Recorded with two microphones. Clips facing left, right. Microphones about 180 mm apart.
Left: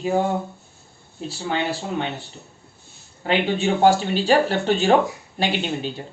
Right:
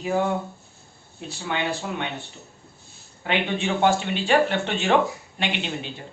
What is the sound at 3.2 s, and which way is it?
Speech, 35° left (ahead or behind).